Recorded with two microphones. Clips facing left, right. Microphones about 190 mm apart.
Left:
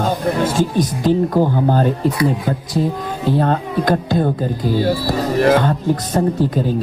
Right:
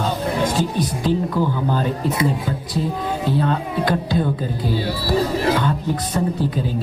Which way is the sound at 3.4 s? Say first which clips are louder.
Left 3 dB; 45° left (ahead or behind).